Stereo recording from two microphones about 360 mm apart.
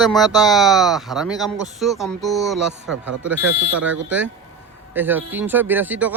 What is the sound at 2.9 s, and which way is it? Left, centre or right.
Speech, right.